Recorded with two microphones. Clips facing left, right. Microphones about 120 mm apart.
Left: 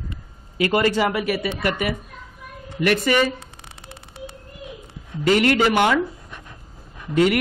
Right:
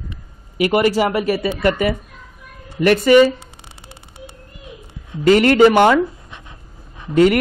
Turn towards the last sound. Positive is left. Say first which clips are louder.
# right 5 dB
turn(degrees=-45)  # may be behind; listen again after turning